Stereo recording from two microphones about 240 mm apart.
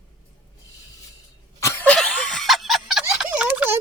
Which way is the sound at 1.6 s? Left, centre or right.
Centre.